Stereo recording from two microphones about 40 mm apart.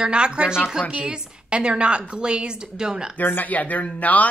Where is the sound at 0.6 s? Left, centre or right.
Centre.